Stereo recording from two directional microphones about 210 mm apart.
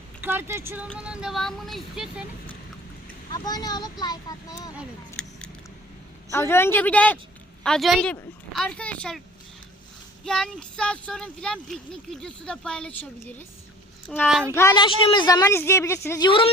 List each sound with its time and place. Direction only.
0.2 s speech: 10° right (ahead or behind)
3.3 s speech: 20° left (ahead or behind)
4.8 s a sound: 5° left (ahead or behind)
6.3 s speech: 10° left (ahead or behind)
10.2 s speech: 5° left (ahead or behind)
14.5 s speech: 15° left (ahead or behind)